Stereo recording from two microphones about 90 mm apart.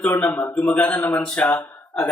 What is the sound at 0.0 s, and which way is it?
Speech, 20° left (ahead or behind).